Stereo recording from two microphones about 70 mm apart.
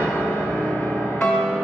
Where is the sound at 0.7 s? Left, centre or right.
Left.